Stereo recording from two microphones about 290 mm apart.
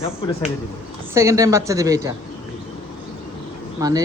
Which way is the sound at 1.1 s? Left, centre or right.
Centre.